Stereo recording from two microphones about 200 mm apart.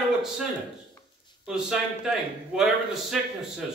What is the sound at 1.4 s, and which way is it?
Speech, 5° right (ahead or behind).